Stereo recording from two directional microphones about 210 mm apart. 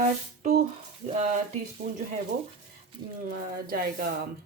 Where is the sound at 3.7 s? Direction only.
45° right (ahead or behind).